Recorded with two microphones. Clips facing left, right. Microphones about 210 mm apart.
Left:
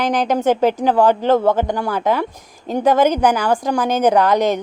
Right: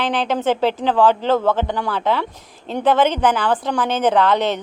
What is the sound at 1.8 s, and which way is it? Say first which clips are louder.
A woman's voice: left 2 dB; 10° left (ahead or behind).